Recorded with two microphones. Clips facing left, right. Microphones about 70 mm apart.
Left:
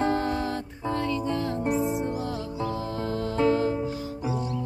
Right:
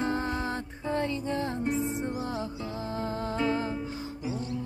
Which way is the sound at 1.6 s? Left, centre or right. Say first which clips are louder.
Left 4 dB; left.